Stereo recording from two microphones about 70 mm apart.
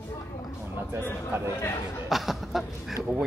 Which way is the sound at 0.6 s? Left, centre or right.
Right.